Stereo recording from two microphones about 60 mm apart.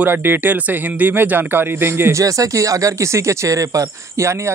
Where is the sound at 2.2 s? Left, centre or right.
Right.